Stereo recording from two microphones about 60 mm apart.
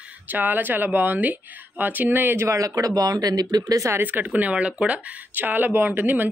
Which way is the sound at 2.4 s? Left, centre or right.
Right.